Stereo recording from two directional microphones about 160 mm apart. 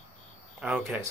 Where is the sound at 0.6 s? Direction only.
5° right (ahead or behind).